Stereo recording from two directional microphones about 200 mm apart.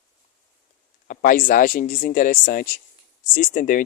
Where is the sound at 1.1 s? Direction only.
45° left (ahead or behind).